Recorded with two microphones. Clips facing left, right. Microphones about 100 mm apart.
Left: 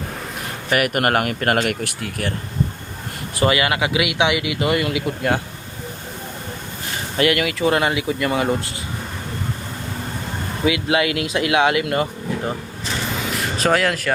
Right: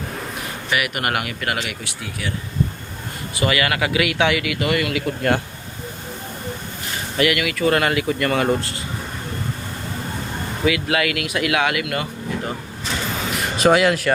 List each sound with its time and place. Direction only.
0.7 s speech: 45° left (ahead or behind)
3.4 s speech: 25° left (ahead or behind)
7.2 s speech: 30° left (ahead or behind)
7.7 s speech: 15° left (ahead or behind)
10.7 s speech: 25° left (ahead or behind)
13.6 s speech: 5° right (ahead or behind)